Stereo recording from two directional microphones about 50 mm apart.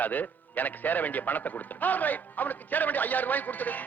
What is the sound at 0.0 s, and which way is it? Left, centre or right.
A man's voice, left.